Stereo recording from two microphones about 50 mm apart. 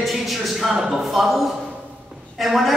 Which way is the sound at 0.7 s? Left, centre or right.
Centre.